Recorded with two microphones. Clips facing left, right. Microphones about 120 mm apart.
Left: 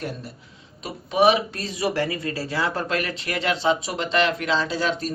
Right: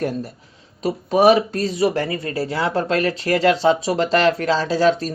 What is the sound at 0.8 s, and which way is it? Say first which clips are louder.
Speech: right 4 dB; 40° right (ahead or behind).